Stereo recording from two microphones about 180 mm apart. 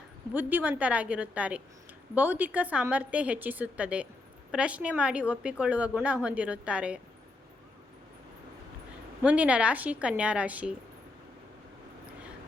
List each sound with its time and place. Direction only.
0.3 s a woman's voice: 10° right (ahead or behind)
9.2 s a woman's voice: 5° right (ahead or behind)